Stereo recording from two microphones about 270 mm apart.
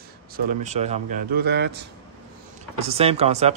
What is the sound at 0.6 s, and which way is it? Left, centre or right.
Speech, right.